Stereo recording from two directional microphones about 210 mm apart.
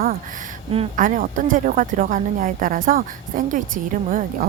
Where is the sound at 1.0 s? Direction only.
40° right (ahead or behind).